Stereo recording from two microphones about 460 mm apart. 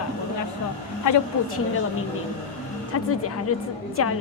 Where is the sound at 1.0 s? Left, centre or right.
Left.